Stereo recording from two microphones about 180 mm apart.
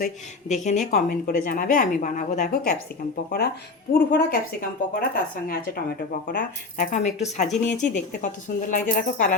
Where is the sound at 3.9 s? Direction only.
55° left (ahead or behind).